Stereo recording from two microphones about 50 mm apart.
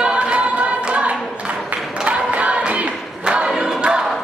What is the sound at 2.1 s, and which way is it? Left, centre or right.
Choir, right.